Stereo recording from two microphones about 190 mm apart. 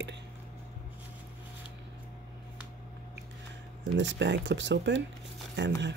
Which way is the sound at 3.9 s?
70° right (ahead or behind).